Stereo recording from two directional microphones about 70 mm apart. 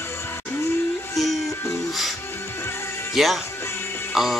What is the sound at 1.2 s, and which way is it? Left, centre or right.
Music, centre.